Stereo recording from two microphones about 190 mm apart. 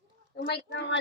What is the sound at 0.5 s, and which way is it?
Speech, 65° left (ahead or behind).